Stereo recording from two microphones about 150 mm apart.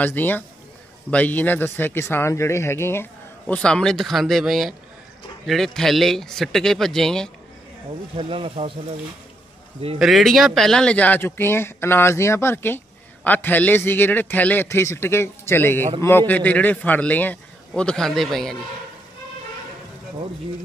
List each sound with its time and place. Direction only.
0.0 s speech: 10° left (ahead or behind)
8.2 s speech: 40° right (ahead or behind)
9.9 s speech: centre (ahead or behind)